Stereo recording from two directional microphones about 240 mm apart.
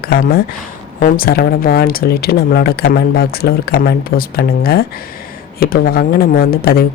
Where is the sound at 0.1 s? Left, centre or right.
Left.